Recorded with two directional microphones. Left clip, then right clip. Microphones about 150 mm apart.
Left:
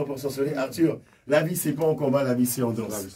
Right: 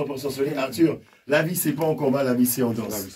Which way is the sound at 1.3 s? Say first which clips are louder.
Right 1 dB; 10° left (ahead or behind).